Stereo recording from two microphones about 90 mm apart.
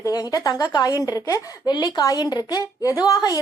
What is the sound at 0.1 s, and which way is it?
A woman's voice, 45° left (ahead or behind).